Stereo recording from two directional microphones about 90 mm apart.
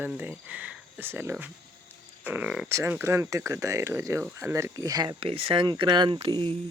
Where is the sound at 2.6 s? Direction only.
30° right (ahead or behind).